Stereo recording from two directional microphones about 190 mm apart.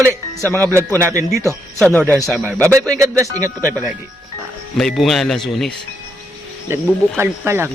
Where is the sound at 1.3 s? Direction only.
15° right (ahead or behind).